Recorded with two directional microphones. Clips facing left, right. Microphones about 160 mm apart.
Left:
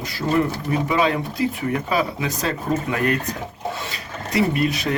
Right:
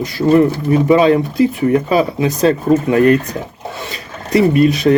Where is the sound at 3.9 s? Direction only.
25° right (ahead or behind).